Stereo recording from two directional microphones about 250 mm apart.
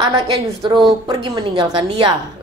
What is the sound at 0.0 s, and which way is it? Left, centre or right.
A woman's voice, centre.